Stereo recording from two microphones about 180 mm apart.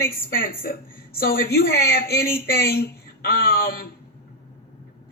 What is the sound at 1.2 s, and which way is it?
Speech, 60° left (ahead or behind).